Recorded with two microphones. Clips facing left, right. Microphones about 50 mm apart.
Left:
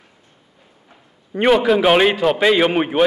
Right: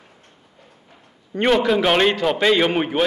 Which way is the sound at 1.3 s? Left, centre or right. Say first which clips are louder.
Left 3 dB; centre.